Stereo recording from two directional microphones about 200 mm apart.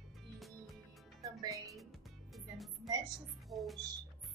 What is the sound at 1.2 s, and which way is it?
Music, 15° right (ahead or behind).